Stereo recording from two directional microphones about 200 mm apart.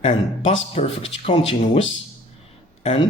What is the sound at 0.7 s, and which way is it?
Speech, 30° left (ahead or behind).